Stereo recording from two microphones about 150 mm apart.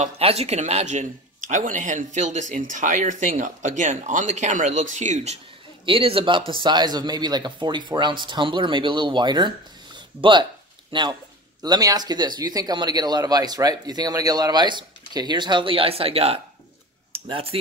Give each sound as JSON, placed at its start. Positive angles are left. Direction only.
{"t": 0.0, "sound": "speech", "side_deg": -45}
{"t": 5.9, "sound": "speech", "side_deg": -40}
{"t": 9.9, "sound": "a sound", "side_deg": -30}
{"t": 10.9, "sound": "speech", "side_deg": -30}